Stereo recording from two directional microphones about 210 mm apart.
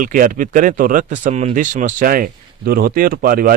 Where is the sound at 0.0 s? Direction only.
40° right (ahead or behind).